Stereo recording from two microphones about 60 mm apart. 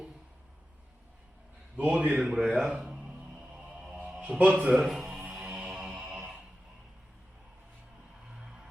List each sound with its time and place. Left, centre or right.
1.9 s a man's voice: right
2.1 s speech: centre
2.6 s music: centre
4.2 s a man's voice: centre
4.7 s a man's voice: centre
5.1 s music: centre